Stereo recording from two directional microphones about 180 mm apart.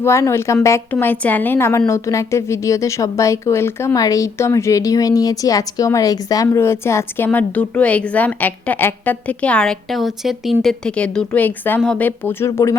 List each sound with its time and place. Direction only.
0.0 s a woman's voice: 15° left (ahead or behind)